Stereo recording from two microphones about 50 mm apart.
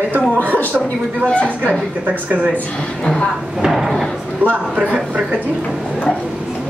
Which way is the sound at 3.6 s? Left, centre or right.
Centre.